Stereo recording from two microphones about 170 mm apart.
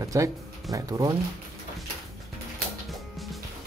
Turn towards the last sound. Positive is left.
turn(degrees=0)  # may be behind; listen again after turning